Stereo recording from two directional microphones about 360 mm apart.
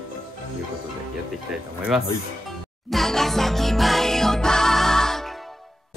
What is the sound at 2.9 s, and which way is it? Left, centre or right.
Music, centre.